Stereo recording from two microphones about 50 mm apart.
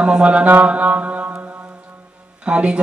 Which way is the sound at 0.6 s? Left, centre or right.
Right.